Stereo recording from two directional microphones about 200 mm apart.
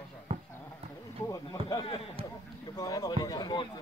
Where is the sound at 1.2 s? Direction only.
20° left (ahead or behind).